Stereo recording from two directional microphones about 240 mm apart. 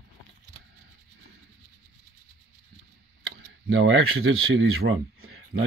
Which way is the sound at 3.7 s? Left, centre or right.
Right.